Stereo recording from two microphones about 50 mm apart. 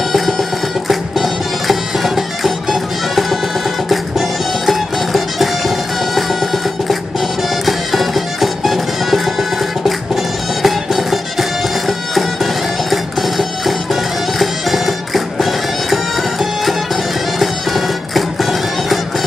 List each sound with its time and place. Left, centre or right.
0.1 s music: centre
12.9 s music: centre